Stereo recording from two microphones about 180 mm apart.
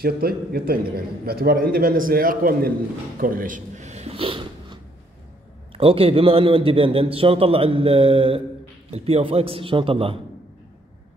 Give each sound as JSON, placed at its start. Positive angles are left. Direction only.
{"t": 0.0, "sound": "a man's voice", "side_deg": -55}
{"t": 3.2, "sound": "a sound", "side_deg": -50}
{"t": 5.7, "sound": "a man's voice", "side_deg": -30}